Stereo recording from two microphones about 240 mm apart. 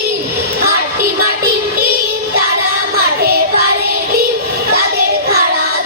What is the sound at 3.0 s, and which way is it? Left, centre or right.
Music, right.